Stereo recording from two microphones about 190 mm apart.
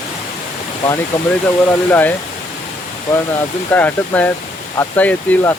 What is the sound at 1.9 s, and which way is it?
Speech, 10° left (ahead or behind).